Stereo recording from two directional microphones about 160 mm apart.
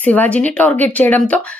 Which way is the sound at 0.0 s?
10° left (ahead or behind).